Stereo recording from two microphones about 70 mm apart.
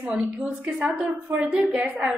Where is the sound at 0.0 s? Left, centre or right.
Right.